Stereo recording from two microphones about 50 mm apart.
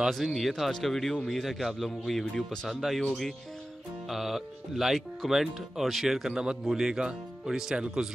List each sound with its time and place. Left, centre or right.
0.1 s speech: centre
2.7 s speech: centre
4.1 s speech: centre
6.3 s speech: centre